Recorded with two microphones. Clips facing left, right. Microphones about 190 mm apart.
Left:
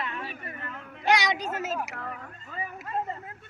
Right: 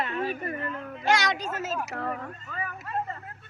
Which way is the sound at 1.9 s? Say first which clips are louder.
Right 6 dB; 40° right (ahead or behind).